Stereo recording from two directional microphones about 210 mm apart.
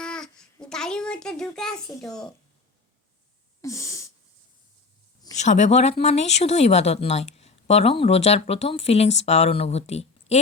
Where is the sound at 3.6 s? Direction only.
15° left (ahead or behind).